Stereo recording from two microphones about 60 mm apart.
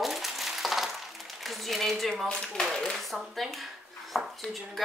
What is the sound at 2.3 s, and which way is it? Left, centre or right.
Speech, centre.